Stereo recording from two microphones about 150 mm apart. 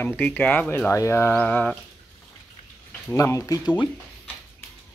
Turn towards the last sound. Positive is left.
turn(degrees=20)  # may be behind; listen again after turning